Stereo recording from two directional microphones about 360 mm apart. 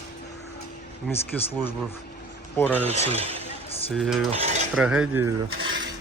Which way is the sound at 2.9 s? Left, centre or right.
Centre.